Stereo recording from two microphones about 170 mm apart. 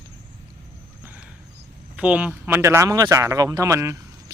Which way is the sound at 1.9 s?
10° right (ahead or behind).